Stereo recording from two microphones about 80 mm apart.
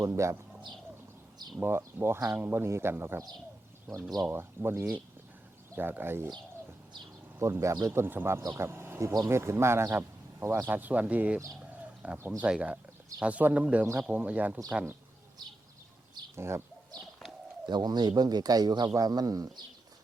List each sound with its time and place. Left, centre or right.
0.0 s speech: right
1.6 s speech: right
4.3 s speech: right
7.3 s speech: right
10.7 s speech: right
12.4 s speech: centre
16.3 s speech: right
17.7 s speech: right